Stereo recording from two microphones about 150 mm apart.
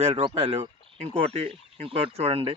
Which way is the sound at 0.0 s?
40° right (ahead or behind).